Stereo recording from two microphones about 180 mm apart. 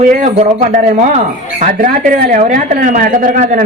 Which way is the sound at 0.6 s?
45° right (ahead or behind).